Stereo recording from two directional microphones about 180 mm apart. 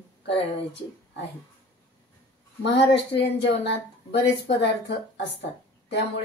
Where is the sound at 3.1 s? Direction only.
70° left (ahead or behind).